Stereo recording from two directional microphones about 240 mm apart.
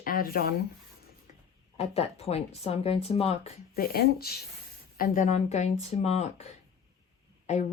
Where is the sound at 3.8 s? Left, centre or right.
Left.